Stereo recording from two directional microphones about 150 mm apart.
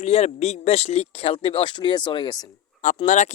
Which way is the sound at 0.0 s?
45° left (ahead or behind).